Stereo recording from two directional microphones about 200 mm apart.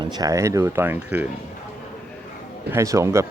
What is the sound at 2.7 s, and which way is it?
Speech, 15° right (ahead or behind).